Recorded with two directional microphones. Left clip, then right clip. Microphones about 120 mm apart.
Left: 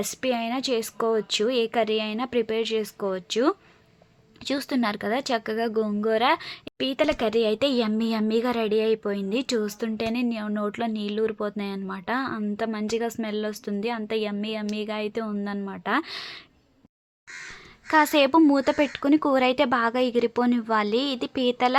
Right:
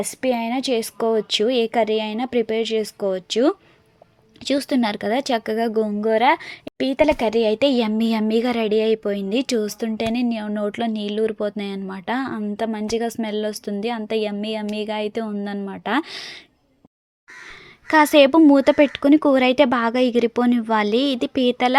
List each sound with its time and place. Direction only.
0.0 s a woman's voice: 20° right (ahead or behind)
17.8 s a woman's voice: 30° right (ahead or behind)